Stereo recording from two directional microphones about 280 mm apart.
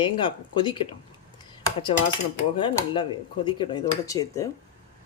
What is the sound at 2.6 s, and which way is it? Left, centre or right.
Speech, centre.